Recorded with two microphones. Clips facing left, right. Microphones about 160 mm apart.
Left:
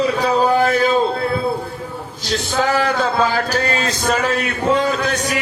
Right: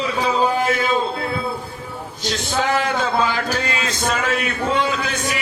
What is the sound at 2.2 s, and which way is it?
A man's voice, 35° left (ahead or behind).